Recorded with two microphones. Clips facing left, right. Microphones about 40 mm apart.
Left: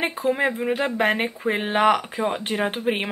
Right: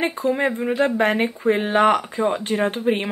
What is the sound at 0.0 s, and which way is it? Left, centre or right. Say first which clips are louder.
Speech: right 1 dB; centre.